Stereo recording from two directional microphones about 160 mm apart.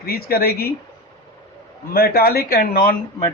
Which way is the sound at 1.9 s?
70° left (ahead or behind).